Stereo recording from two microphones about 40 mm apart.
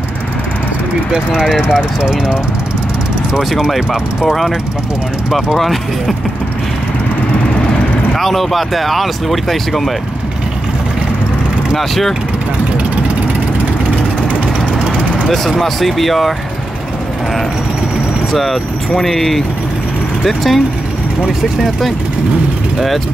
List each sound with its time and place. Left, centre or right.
1.5 s speech: centre
4.2 s speech: centre
5.6 s speech: centre
8.2 s speech: centre
11.7 s speech: centre
15.2 s speech: centre
18.3 s speech: centre